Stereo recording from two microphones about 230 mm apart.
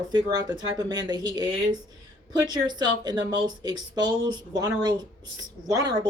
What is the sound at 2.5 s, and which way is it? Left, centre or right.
Speech, centre.